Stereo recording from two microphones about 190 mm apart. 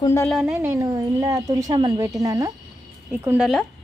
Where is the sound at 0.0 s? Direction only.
15° left (ahead or behind).